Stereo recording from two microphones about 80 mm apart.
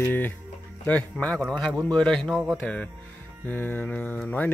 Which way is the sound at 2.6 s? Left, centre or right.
Centre.